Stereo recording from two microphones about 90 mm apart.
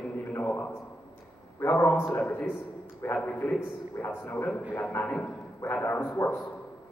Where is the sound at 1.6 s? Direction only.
25° left (ahead or behind).